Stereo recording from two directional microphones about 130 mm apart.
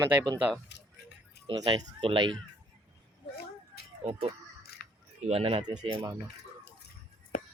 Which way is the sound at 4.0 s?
50° right (ahead or behind).